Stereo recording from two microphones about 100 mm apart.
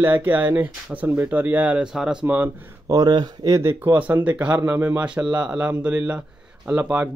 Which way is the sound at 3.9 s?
15° right (ahead or behind).